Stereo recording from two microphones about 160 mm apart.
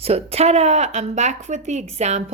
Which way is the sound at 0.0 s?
40° right (ahead or behind).